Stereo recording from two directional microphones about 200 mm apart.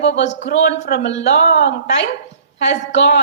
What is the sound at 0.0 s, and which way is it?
A woman's voice, 65° left (ahead or behind).